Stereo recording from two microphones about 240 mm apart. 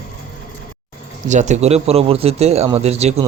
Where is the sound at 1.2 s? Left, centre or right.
Right.